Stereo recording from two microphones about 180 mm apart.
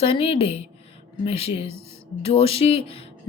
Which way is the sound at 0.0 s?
30° left (ahead or behind).